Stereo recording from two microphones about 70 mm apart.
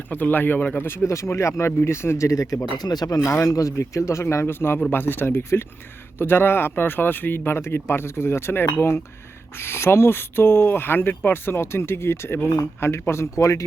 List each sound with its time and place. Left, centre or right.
0.1 s speech: left
3.2 s speech: left